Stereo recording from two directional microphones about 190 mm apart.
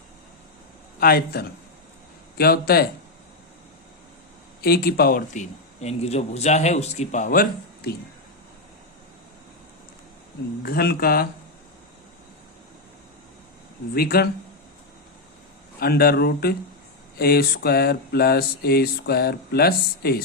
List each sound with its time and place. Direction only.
0.9 s speech: 50° left (ahead or behind)
4.6 s a man's voice: 55° left (ahead or behind)
10.6 s speech: 55° left (ahead or behind)
13.9 s speech: 55° left (ahead or behind)
15.8 s a sound: 55° left (ahead or behind)